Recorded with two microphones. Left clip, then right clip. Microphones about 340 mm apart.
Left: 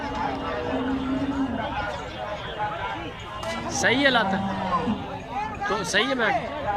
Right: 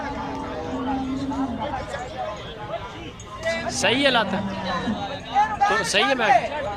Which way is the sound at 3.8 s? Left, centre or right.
Centre.